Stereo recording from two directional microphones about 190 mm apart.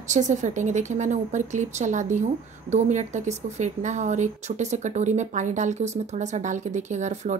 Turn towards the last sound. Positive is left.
turn(degrees=-40)  # may be behind; listen again after turning